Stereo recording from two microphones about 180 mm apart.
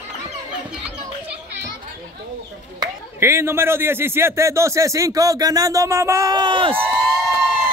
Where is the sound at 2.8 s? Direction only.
15° right (ahead or behind).